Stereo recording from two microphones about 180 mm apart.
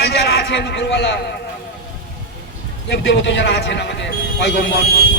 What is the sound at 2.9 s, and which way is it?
A man's voice, 85° left.